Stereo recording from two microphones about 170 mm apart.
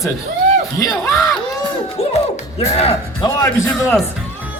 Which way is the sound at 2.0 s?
35° left (ahead or behind).